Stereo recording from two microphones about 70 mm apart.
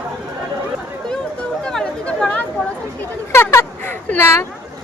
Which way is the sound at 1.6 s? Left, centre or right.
Centre.